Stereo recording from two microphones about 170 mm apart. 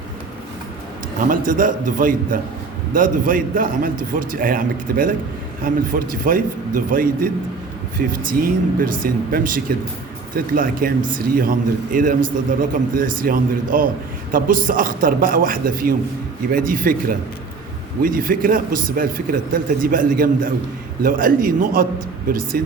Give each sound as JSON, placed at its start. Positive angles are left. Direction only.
{"t": 1.3, "sound": "a man's voice", "side_deg": -50}